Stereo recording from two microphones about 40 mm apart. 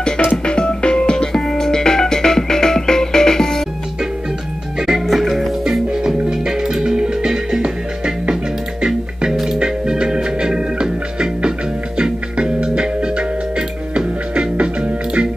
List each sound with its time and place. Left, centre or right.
0.5 s music: left
4.7 s music: centre
5.0 s music: centre
5.7 s music: centre